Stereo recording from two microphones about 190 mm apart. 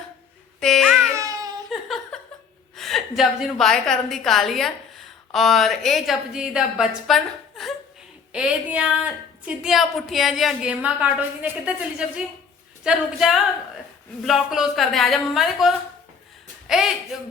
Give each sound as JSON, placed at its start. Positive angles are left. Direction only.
{"t": 0.6, "sound": "music", "side_deg": 0}
{"t": 1.1, "sound": "a sound", "side_deg": -15}
{"t": 2.7, "sound": "a woman's voice", "side_deg": 0}